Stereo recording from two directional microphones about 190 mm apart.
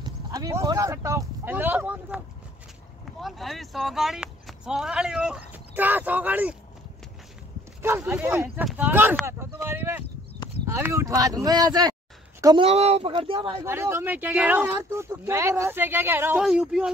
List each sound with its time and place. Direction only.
0.0 s speech: 20° right (ahead or behind)
7.8 s a woman's voice: 15° right (ahead or behind)
12.6 s speech: 35° right (ahead or behind)
13.7 s speech: 10° right (ahead or behind)